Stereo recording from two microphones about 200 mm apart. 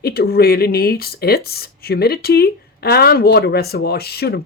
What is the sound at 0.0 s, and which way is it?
Speech, 50° left (ahead or behind).